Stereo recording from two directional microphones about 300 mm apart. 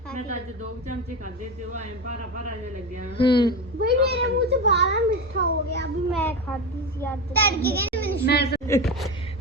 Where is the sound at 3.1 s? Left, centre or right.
Centre.